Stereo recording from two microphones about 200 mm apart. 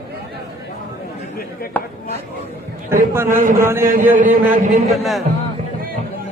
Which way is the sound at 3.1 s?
10° right (ahead or behind).